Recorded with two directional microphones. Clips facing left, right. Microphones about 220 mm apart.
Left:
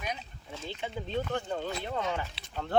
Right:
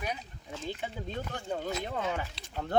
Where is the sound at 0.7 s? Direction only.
10° right (ahead or behind).